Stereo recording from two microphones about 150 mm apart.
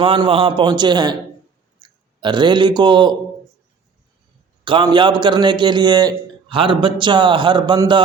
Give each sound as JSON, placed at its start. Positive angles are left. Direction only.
{"t": 0.0, "sound": "a man's voice", "side_deg": -35}
{"t": 4.6, "sound": "a man's voice", "side_deg": -30}